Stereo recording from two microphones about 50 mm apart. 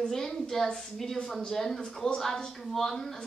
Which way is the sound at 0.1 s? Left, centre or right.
Centre.